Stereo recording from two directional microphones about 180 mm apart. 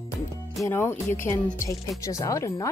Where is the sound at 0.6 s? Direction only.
15° left (ahead or behind).